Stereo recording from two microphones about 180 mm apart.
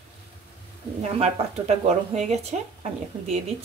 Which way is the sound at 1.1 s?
35° right (ahead or behind).